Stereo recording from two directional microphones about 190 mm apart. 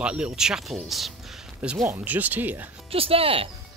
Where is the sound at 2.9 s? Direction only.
30° right (ahead or behind).